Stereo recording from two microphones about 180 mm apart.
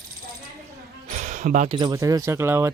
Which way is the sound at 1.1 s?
40° right (ahead or behind).